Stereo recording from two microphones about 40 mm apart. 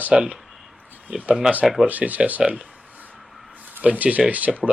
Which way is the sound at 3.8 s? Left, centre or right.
Right.